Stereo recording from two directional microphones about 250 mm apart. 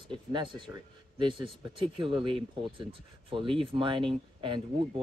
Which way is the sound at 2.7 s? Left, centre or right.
Centre.